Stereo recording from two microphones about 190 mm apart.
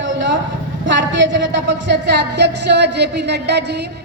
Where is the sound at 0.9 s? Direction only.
75° right (ahead or behind).